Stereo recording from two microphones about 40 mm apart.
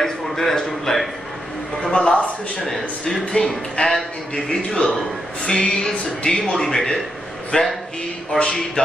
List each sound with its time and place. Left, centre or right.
0.0 s a sound: centre
1.8 s a sound: centre
2.6 s a man's voice: centre
3.4 s a man's voice: left
3.8 s a man's voice: left
4.5 s a man's voice: left
7.5 s a man's voice: left